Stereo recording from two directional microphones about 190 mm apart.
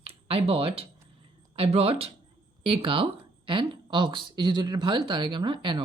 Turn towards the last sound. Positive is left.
turn(degrees=-25)  # may be behind; listen again after turning